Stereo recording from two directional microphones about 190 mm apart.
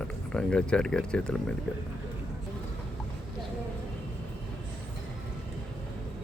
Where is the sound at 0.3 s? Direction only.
5° left (ahead or behind).